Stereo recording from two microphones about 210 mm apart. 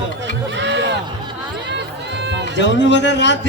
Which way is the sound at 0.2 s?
60° right (ahead or behind).